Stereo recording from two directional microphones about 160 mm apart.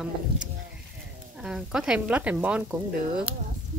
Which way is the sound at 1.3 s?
5° right (ahead or behind).